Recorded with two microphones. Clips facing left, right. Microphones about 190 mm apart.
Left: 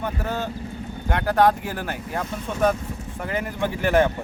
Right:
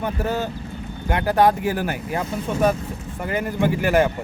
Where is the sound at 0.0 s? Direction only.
5° right (ahead or behind).